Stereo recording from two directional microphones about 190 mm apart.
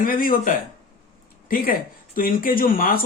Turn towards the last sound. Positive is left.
turn(degrees=50)  # may be behind; listen again after turning